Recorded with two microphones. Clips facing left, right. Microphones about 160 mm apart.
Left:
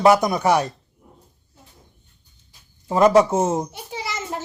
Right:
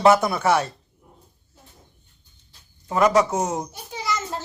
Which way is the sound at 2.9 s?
30° left (ahead or behind).